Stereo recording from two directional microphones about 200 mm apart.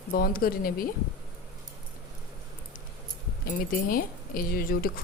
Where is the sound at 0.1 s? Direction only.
45° left (ahead or behind).